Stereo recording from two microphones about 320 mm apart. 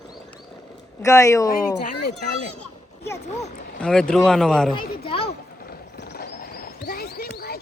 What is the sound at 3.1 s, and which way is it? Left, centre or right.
Speech, centre.